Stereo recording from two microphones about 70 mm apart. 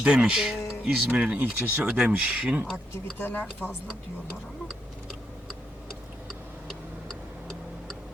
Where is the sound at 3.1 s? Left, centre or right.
Left.